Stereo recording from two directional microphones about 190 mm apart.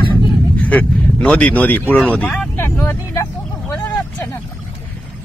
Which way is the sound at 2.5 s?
15° left (ahead or behind).